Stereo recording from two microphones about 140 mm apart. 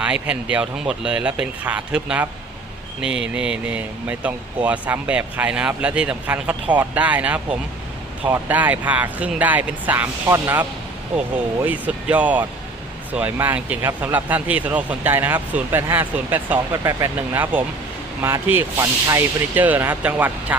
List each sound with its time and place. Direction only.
0.0 s speech: 10° right (ahead or behind)